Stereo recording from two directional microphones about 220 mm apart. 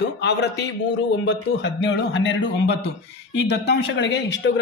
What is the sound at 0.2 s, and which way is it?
A man's voice, 50° left (ahead or behind).